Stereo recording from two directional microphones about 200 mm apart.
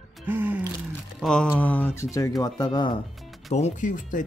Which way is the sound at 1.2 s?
5° left (ahead or behind).